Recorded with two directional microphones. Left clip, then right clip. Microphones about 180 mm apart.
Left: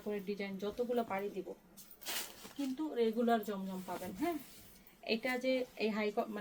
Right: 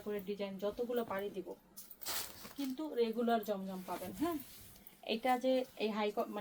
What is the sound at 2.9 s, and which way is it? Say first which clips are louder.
Speech: left 1 dB; 20° left (ahead or behind).